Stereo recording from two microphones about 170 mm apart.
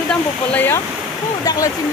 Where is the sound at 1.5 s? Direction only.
20° left (ahead or behind).